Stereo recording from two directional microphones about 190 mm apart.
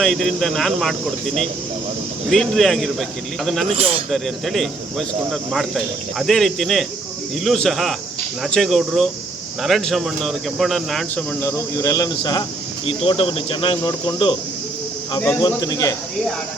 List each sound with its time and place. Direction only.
0.0 s speech: centre (ahead or behind)
3.7 s speech: 30° right (ahead or behind)
4.1 s speech: centre (ahead or behind); by 16.0 s 20° left (ahead or behind)